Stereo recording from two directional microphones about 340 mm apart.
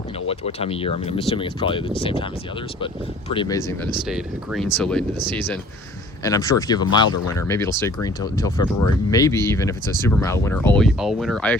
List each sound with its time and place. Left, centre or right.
0.3 s speech: centre
6.2 s speech: centre